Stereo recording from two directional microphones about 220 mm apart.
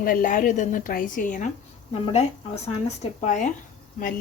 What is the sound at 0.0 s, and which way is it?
A woman's voice, 40° left (ahead or behind).